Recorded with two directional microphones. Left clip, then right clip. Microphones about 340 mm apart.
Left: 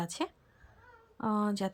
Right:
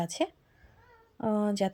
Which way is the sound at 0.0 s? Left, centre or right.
Centre.